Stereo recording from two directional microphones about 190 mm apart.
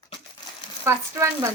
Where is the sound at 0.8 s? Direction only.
15° right (ahead or behind).